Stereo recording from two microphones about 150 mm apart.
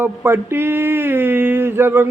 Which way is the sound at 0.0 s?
15° right (ahead or behind).